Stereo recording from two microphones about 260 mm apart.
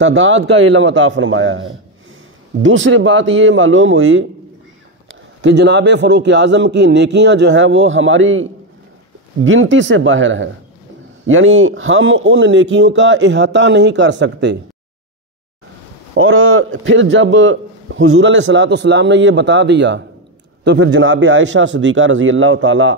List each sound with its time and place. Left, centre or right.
0.0 s a man's voice: right
5.4 s a man's voice: right
16.2 s a man's voice: right